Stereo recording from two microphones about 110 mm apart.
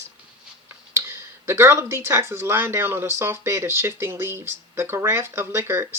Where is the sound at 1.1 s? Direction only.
20° right (ahead or behind).